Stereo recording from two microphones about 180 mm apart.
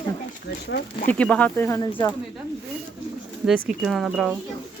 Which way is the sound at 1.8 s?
25° left (ahead or behind).